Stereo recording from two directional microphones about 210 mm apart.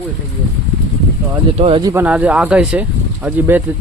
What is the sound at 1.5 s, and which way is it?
Speech, 25° right (ahead or behind).